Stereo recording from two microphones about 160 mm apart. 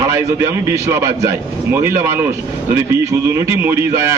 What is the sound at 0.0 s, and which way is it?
A man's voice, 20° right (ahead or behind).